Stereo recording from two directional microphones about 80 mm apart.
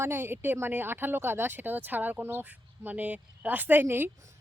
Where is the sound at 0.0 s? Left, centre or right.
Right.